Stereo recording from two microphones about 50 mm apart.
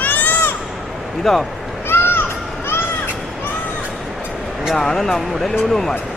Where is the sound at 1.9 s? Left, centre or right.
Left.